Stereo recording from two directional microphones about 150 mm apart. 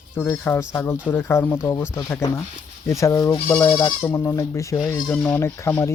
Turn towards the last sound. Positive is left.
turn(degrees=20)  # may be behind; listen again after turning